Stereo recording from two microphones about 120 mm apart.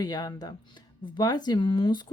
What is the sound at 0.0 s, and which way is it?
Speech, 35° left (ahead or behind).